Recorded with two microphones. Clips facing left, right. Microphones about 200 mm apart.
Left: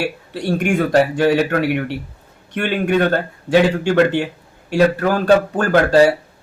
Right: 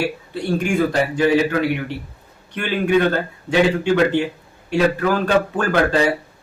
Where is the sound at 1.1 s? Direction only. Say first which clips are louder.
Left 1 dB; 70° left (ahead or behind).